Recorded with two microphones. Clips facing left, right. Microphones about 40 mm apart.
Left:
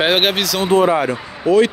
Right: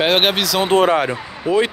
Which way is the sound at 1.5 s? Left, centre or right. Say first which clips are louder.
Left 4 dB; centre.